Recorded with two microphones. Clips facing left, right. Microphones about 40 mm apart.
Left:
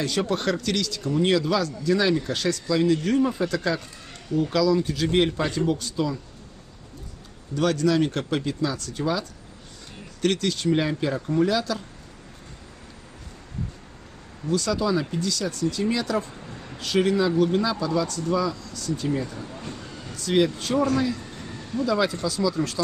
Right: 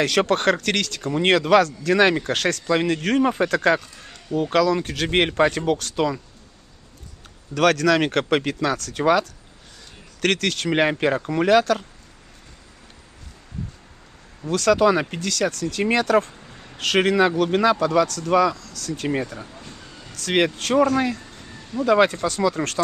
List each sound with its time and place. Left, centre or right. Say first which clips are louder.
0.0 s speech: right 6 dB; right
7.5 s speech: right 4 dB; right
14.5 s speech: right 6 dB; right
19.5 s vehicle: left 4 dB; centre
20.2 s speech: right 1 dB; right
21.2 s a sound: left 3 dB; centre
21.8 s speech: right 7 dB; right